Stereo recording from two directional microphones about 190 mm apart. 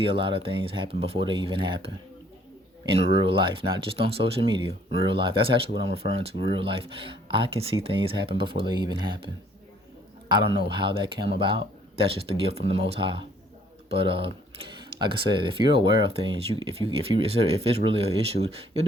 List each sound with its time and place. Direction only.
0.0 s speech: 30° right (ahead or behind)
3.2 s a man's voice: 30° right (ahead or behind)